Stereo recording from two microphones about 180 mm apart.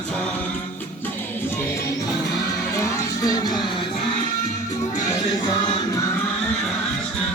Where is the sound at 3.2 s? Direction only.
20° left (ahead or behind).